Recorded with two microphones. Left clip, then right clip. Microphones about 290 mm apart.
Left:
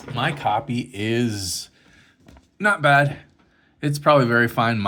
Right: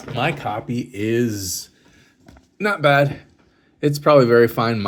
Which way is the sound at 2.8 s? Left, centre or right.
Centre.